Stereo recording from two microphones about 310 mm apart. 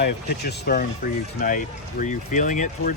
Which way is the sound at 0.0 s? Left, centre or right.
Left.